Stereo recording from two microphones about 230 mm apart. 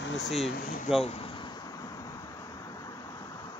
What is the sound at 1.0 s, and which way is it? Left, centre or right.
Air conditioning, left.